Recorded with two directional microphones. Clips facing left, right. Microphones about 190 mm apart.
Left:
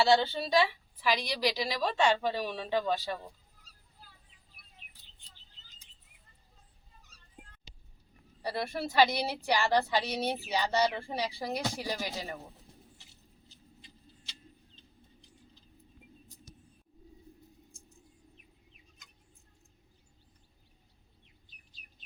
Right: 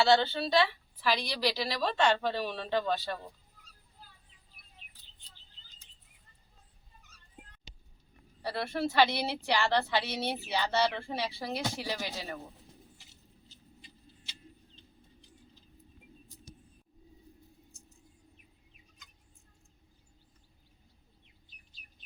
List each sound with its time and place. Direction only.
0.0 s speech: 5° left (ahead or behind)
8.4 s speech: 15° left (ahead or behind)
16.5 s vehicle: 25° right (ahead or behind)